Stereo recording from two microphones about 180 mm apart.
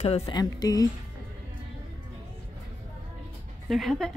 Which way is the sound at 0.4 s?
20° left (ahead or behind).